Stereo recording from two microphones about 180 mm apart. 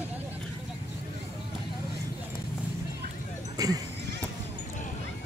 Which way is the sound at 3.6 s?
20° right (ahead or behind).